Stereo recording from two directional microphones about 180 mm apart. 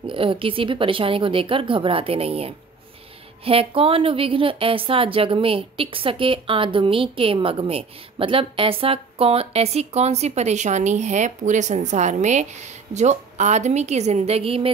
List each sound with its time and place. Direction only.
0.0 s speech: 30° right (ahead or behind)